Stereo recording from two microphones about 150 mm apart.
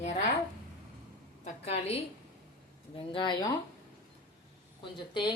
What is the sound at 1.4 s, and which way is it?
A woman's voice, 45° left (ahead or behind).